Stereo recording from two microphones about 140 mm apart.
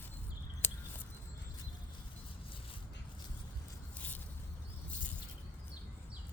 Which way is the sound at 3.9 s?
10° left (ahead or behind).